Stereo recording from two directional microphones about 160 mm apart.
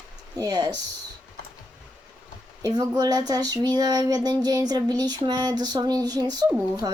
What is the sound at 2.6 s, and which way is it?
Child singing, 25° right (ahead or behind).